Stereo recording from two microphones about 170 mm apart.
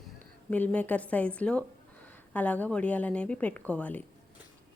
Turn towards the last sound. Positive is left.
turn(degrees=10)  # may be behind; listen again after turning